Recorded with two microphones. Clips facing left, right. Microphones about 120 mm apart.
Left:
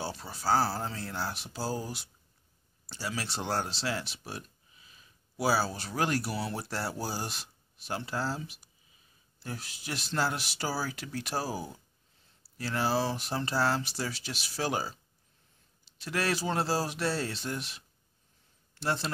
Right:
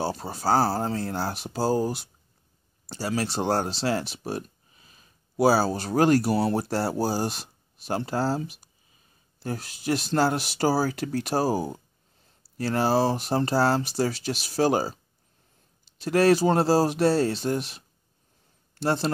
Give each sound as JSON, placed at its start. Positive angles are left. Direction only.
{"t": 0.0, "sound": "speech", "side_deg": -45}
{"t": 16.0, "sound": "speech", "side_deg": -40}